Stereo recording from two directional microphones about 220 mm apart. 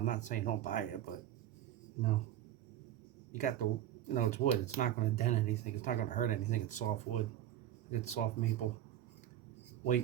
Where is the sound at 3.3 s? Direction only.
35° left (ahead or behind).